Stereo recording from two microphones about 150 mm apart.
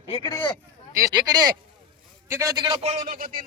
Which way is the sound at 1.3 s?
25° right (ahead or behind).